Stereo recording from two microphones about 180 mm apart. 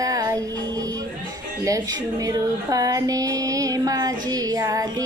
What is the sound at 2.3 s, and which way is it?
Music, 20° right (ahead or behind).